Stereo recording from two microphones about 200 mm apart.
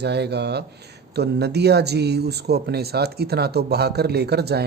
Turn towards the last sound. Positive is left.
turn(degrees=-55)  # may be behind; listen again after turning